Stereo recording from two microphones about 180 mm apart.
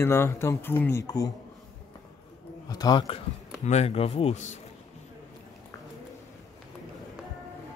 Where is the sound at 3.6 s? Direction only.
35° left (ahead or behind).